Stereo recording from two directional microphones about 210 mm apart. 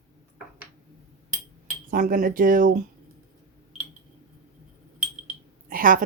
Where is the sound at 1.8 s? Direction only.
40° right (ahead or behind).